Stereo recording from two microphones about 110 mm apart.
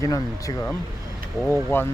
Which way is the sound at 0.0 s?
30° left (ahead or behind).